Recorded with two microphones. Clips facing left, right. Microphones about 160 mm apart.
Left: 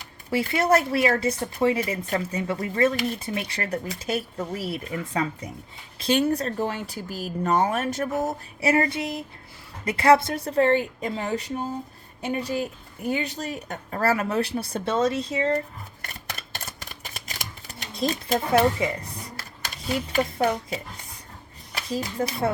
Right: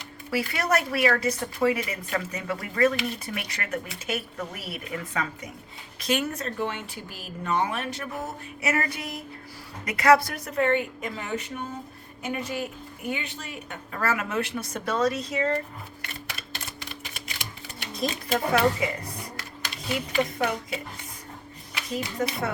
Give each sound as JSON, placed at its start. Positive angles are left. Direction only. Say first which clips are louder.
{"t": 0.3, "sound": "speech", "louder": "left 5 dB", "side_deg": 25}
{"t": 16.0, "sound": "camera", "louder": "left 3 dB", "side_deg": 45}
{"t": 18.3, "sound": "speech", "louder": "left 2 dB", "side_deg": 30}
{"t": 19.9, "sound": "speech", "louder": "left 2 dB", "side_deg": 40}